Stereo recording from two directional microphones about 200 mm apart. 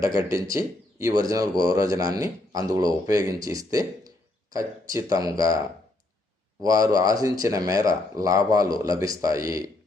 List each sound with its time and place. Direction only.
0.0 s speech: 15° right (ahead or behind)